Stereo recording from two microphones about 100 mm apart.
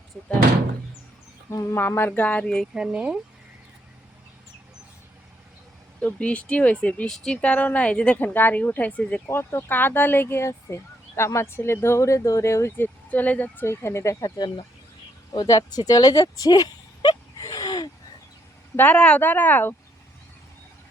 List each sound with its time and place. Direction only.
1.5 s speech: 25° left (ahead or behind); by 2.6 s 10° left (ahead or behind)
2.7 s speech: 10° right (ahead or behind)
6.0 s a woman's voice: 10° left (ahead or behind)
9.3 s speech: 25° left (ahead or behind)
18.8 s a woman's voice: 15° left (ahead or behind)